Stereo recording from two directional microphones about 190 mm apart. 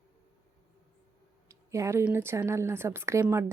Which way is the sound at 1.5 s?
15° right (ahead or behind).